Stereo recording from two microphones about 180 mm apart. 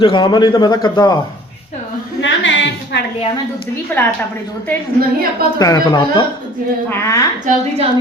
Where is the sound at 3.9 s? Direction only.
10° left (ahead or behind).